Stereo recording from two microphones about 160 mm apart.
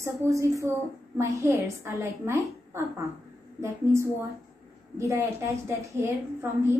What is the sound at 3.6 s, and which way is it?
A woman's voice, 15° right (ahead or behind).